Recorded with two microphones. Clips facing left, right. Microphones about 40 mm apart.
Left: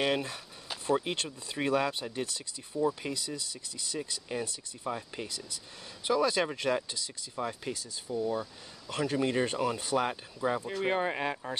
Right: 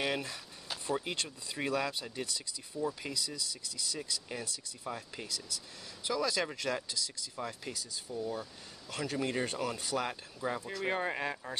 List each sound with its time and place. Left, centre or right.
0.0 s speech: centre; by 8.5 s left
8.8 s speech: centre